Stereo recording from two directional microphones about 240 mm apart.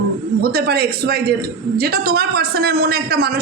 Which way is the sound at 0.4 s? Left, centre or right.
Right.